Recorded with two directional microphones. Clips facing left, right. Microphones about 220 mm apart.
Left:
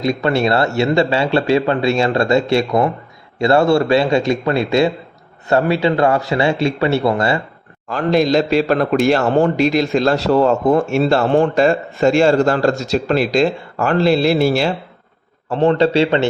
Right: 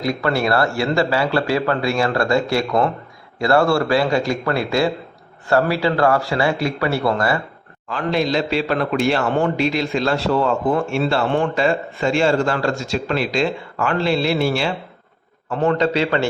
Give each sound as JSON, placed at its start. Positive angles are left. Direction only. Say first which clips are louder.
{"t": 0.0, "sound": "a man's voice", "louder": "left 4 dB", "side_deg": 20}
{"t": 7.9, "sound": "a man's voice", "louder": "left 5 dB", "side_deg": 40}